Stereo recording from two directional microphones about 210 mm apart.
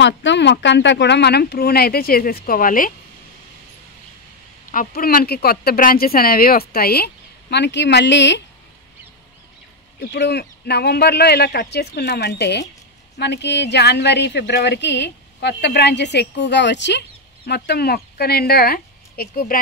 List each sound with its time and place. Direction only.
0.0 s speech: 55° left (ahead or behind); by 2.9 s 40° left (ahead or behind)
4.6 s speech: 40° left (ahead or behind)
9.9 s a woman's voice: 50° left (ahead or behind)